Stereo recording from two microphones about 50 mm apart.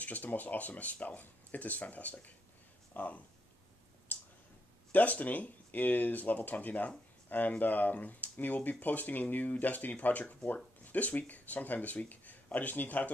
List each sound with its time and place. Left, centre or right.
0.0 s speech: left
4.1 s a sound: left
4.9 s speech: left